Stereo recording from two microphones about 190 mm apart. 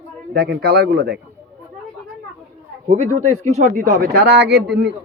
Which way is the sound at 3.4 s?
40° right (ahead or behind).